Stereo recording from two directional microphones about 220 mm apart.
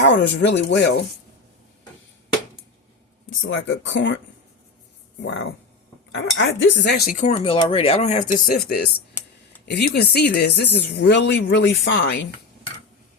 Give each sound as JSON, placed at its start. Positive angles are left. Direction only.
{"t": 0.4, "sound": "speech", "side_deg": 55}
{"t": 3.5, "sound": "speech", "side_deg": 55}
{"t": 5.2, "sound": "speech", "side_deg": 55}